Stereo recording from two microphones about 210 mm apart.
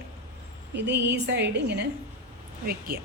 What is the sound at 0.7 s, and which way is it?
A woman's voice, 55° right (ahead or behind).